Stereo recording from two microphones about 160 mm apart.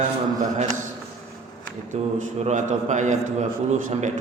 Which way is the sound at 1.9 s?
50° right (ahead or behind).